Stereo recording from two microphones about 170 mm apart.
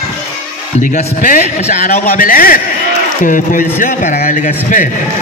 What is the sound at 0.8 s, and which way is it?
A man's voice, 45° left (ahead or behind).